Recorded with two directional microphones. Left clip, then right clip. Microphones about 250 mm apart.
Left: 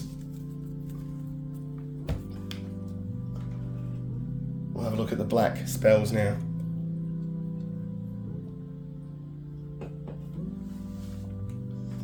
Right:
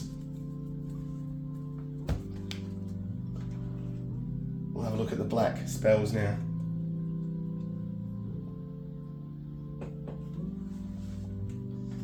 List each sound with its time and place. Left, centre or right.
4.7 s speech: left